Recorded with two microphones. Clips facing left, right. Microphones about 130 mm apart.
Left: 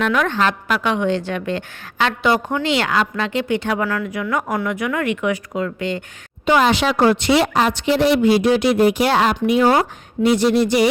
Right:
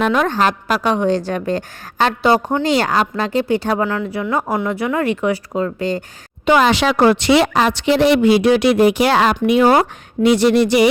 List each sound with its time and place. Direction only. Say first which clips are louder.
0.0 s a woman's voice: right 2 dB; 35° right (ahead or behind)
6.4 s a woman's voice: right 2 dB; 90° right; by 8.8 s 75° right (ahead or behind)
8.9 s a woman's voice: right 2 dB; 90° right
9.5 s speech: right 3 dB; 70° right (ahead or behind)
10.2 s a woman's voice: right 3 dB; 85° right